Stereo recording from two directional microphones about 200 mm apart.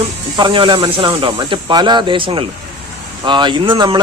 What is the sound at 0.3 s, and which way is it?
Speech, 25° right (ahead or behind).